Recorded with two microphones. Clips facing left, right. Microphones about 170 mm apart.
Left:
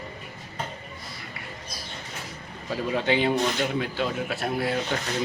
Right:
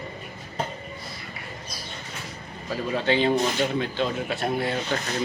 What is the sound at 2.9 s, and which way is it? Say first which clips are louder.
Speech: right 2 dB; 15° left (ahead or behind).